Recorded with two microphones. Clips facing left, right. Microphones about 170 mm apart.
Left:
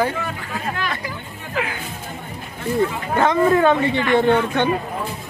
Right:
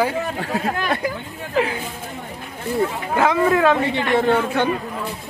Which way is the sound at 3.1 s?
5° right (ahead or behind).